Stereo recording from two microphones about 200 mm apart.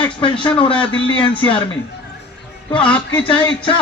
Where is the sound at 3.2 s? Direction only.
25° left (ahead or behind).